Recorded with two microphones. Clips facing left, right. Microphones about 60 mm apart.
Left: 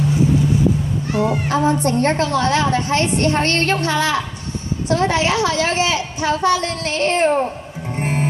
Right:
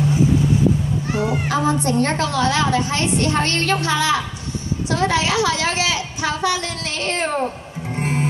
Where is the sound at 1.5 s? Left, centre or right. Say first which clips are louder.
Left 1 dB; left.